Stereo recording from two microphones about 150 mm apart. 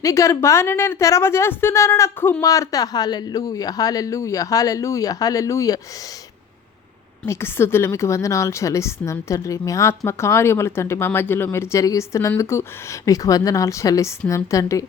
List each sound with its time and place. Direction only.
0.0 s a woman's voice: 20° left (ahead or behind)
7.3 s a woman's voice: 15° left (ahead or behind)